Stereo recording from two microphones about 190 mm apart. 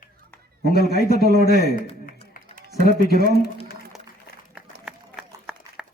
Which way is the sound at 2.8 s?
55° left (ahead or behind).